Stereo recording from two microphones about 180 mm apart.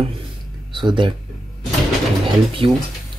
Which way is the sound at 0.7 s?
25° right (ahead or behind).